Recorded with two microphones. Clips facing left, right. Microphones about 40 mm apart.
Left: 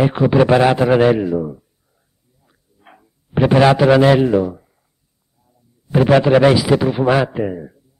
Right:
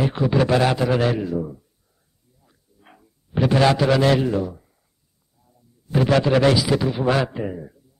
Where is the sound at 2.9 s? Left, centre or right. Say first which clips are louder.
Left 3 dB; left.